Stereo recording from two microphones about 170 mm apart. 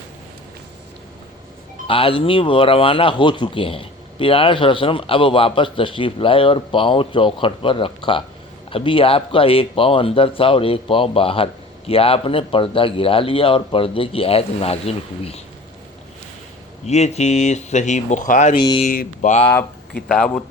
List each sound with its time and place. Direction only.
1.9 s speech: 30° left (ahead or behind)
16.8 s speech: 40° left (ahead or behind)
18.5 s speech: 30° left (ahead or behind)
18.9 s speech: 50° left (ahead or behind)
20.1 s a man's voice: 5° left (ahead or behind)